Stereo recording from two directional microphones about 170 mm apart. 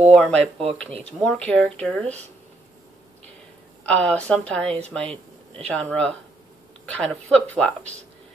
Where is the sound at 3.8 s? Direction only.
5° left (ahead or behind).